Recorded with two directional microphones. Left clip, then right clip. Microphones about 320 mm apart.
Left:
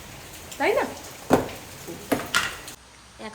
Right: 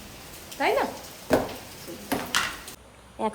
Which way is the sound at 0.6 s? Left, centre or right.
Centre.